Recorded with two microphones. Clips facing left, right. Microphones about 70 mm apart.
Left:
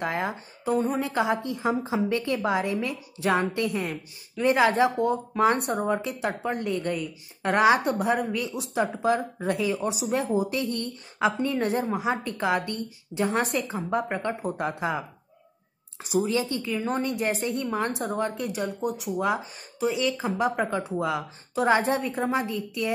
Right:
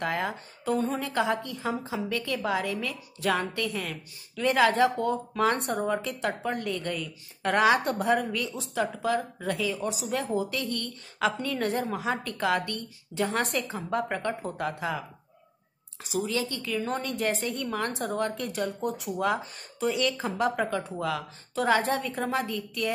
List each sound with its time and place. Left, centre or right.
0.0 s a woman's voice: centre